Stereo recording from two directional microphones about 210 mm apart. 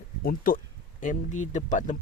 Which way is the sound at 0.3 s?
40° left (ahead or behind).